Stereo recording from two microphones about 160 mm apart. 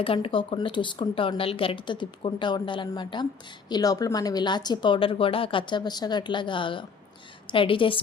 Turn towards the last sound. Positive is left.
turn(degrees=35)  # may be behind; listen again after turning